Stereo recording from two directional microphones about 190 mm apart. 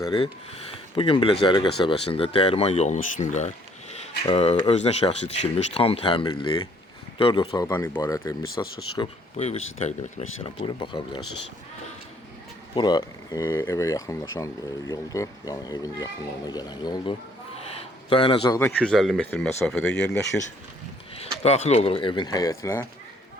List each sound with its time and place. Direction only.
0.9 s speech: 30° left (ahead or behind)
9.0 s speech: 35° left (ahead or behind)
12.7 s speech: 25° left (ahead or behind)
18.8 s speech: 5° left (ahead or behind)
21.4 s speech: 35° left (ahead or behind); by 22.9 s 15° left (ahead or behind)